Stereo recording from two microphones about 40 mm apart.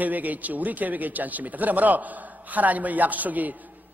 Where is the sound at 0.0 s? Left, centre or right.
Right.